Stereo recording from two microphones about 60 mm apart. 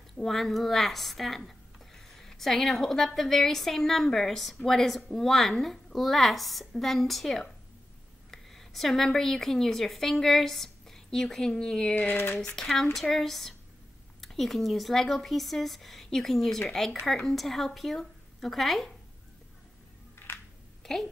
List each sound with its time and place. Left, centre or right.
0.2 s speech: centre
2.0 s a sound: centre
3.2 s a woman's voice: centre
12.1 s speech: left
12.5 s speech: centre
20.8 s a child's voice: centre